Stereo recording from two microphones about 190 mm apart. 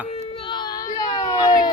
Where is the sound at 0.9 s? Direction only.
20° left (ahead or behind).